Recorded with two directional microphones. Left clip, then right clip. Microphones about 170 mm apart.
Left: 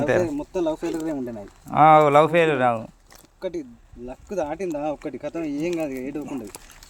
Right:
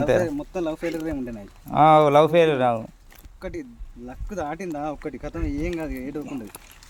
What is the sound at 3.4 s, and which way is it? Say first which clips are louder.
Speech: left 4 dB; 25° right (ahead or behind).